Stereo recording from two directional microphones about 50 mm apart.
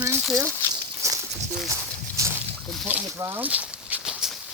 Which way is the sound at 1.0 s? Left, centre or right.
Right.